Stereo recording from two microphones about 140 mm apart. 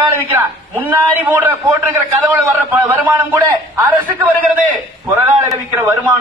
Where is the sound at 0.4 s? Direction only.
10° right (ahead or behind).